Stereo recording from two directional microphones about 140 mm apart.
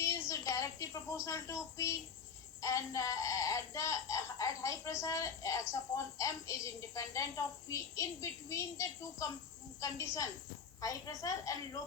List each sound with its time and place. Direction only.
0.0 s a woman's voice: 20° left (ahead or behind)